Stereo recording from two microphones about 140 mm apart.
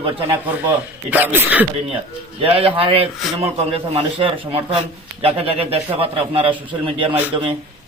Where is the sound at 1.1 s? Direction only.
15° right (ahead or behind).